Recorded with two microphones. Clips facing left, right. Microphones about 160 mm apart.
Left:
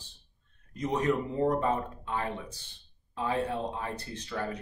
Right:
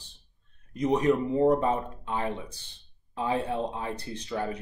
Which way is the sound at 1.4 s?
20° right (ahead or behind).